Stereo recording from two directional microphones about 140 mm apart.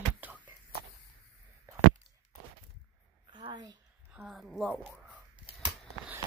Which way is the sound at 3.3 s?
35° right (ahead or behind).